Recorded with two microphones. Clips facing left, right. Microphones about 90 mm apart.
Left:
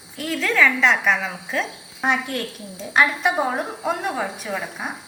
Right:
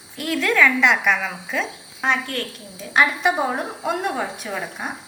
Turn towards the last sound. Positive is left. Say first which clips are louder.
# even
turn(degrees=0)  # may be behind; listen again after turning